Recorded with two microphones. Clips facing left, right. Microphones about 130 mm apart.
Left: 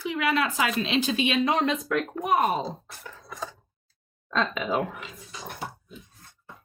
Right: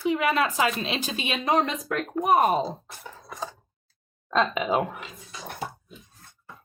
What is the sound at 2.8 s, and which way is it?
Typing, 15° right (ahead or behind).